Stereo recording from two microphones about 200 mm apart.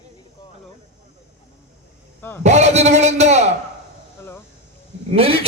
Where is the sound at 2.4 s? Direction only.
35° right (ahead or behind).